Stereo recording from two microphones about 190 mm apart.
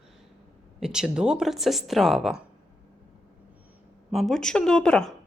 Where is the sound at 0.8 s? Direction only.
5° right (ahead or behind).